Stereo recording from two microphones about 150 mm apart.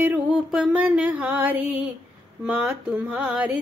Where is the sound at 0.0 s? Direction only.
10° right (ahead or behind).